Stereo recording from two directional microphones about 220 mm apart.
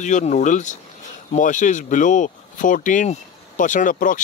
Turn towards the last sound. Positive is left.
turn(degrees=35)  # may be behind; listen again after turning